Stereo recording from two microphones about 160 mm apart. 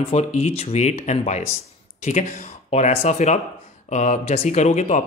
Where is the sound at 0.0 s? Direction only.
45° left (ahead or behind).